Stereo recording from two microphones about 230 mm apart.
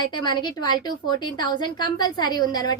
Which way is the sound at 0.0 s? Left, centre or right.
Centre.